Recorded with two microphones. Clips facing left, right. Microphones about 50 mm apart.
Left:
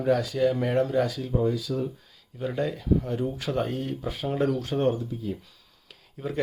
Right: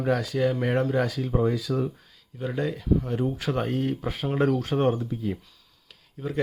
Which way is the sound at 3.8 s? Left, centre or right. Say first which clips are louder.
Right 3 dB; right.